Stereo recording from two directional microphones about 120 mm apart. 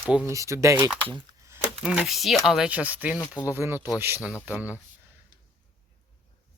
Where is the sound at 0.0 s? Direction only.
10° right (ahead or behind).